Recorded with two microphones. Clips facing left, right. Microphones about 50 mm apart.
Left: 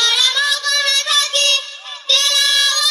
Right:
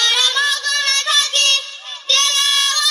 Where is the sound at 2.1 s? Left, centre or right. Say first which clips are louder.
Left 1 dB; right.